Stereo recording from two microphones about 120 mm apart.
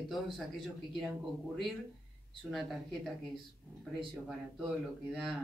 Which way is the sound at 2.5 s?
Centre (ahead or behind).